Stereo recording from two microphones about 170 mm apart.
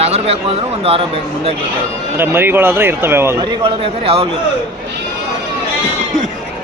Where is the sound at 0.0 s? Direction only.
35° right (ahead or behind).